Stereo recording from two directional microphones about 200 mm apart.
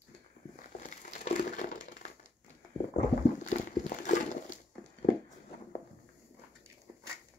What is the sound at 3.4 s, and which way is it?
Crumpling, 40° left (ahead or behind).